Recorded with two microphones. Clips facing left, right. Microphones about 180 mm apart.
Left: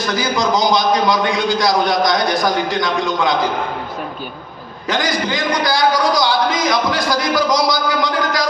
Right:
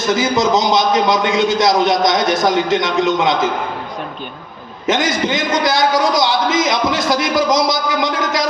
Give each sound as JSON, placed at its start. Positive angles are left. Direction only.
{"t": 0.0, "sound": "a man's voice", "side_deg": -20}
{"t": 4.9, "sound": "a man's voice", "side_deg": -20}